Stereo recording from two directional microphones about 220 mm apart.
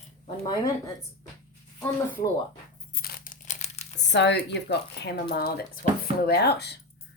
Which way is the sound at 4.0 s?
50° left (ahead or behind).